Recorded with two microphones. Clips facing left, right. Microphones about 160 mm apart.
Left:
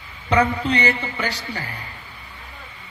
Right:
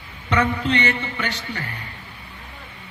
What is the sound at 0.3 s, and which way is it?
Speech, 35° left (ahead or behind).